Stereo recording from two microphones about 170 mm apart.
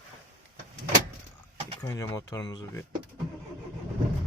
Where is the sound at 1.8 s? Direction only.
20° left (ahead or behind).